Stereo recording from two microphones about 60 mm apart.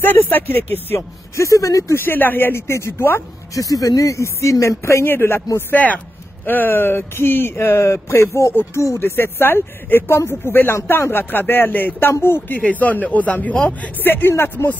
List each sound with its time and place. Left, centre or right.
0.0 s speech: left
1.3 s speech: left
2.0 s speech: left
3.5 s speech: left
5.1 s speech: left
5.7 s a man's voice: left
13.9 s speech: left